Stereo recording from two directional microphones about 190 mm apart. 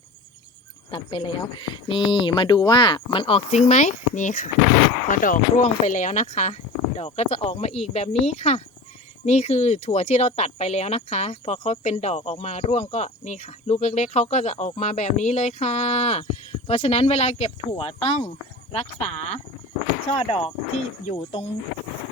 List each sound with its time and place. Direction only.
0.9 s speech: 25° left (ahead or behind)